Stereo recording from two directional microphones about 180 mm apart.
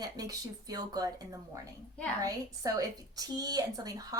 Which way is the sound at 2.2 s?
20° right (ahead or behind).